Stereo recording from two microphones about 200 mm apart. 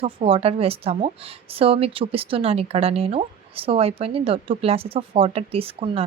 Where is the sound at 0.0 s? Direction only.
30° right (ahead or behind).